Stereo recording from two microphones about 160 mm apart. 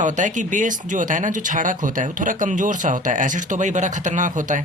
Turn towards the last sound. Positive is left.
turn(degrees=-50)  # may be behind; listen again after turning